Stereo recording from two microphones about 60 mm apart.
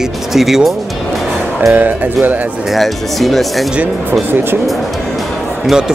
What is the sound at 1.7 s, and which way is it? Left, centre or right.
Speech, right.